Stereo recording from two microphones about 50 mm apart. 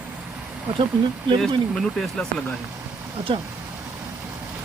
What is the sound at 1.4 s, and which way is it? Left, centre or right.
Speech, centre.